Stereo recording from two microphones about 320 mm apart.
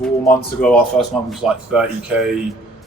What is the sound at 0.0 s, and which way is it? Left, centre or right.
Speech, centre.